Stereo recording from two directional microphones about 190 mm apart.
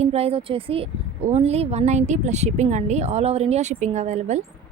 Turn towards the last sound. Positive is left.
turn(degrees=-35)  # may be behind; listen again after turning